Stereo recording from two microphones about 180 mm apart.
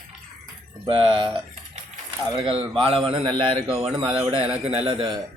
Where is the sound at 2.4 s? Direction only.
30° right (ahead or behind).